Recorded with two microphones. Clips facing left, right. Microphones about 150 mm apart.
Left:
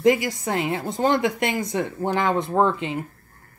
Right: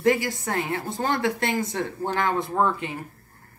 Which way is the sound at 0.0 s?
20° left (ahead or behind).